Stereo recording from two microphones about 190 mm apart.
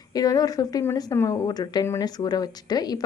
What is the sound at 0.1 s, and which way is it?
Speech, 20° left (ahead or behind).